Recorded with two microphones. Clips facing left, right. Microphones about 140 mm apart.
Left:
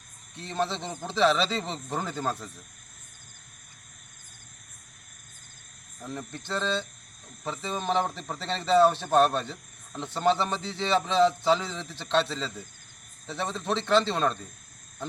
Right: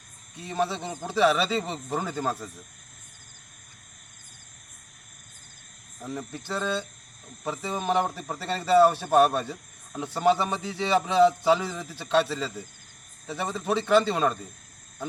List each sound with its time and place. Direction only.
0.3 s a man's voice: 5° right (ahead or behind)
6.0 s a man's voice: 5° right (ahead or behind)